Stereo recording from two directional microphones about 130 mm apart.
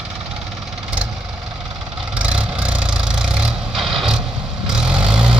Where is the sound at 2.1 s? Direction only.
10° right (ahead or behind).